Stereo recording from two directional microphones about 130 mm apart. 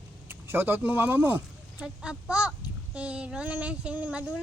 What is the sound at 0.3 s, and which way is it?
Speech, 15° right (ahead or behind).